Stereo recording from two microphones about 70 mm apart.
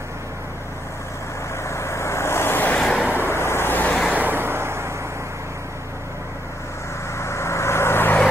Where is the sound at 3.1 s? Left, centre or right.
Left.